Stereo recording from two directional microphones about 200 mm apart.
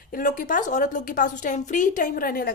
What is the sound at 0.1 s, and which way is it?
A woman's voice, 40° left (ahead or behind).